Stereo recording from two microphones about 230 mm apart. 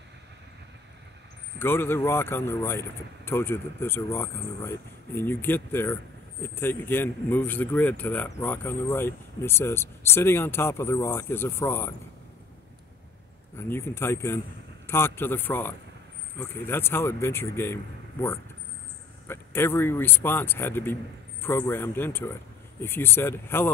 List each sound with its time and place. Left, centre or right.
1.6 s speech: centre
13.6 s speech: centre